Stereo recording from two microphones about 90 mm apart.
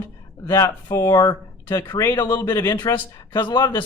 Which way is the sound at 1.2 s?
50° left (ahead or behind).